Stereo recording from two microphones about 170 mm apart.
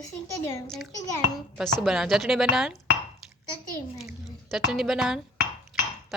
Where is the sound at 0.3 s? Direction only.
15° left (ahead or behind).